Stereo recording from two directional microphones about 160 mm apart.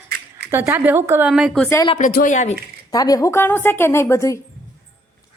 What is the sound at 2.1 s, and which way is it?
Speech, 50° left (ahead or behind).